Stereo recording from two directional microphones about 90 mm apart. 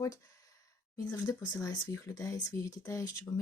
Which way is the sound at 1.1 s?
35° left (ahead or behind).